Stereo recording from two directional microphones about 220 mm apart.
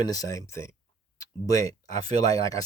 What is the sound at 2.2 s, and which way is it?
Speech, 15° left (ahead or behind).